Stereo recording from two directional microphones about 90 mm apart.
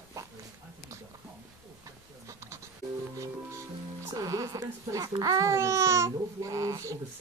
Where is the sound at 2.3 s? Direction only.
35° right (ahead or behind).